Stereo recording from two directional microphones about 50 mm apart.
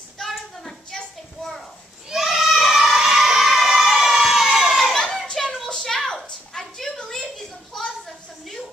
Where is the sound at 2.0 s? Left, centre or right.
Centre.